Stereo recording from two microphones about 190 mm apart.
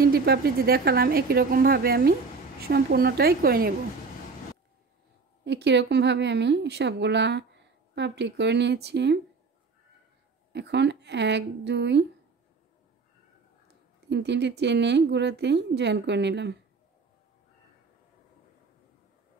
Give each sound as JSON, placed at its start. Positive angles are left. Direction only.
{"t": 0.0, "sound": "a woman's voice", "side_deg": -55}
{"t": 5.4, "sound": "speech", "side_deg": -65}
{"t": 10.5, "sound": "speech", "side_deg": -65}
{"t": 14.0, "sound": "speech", "side_deg": -65}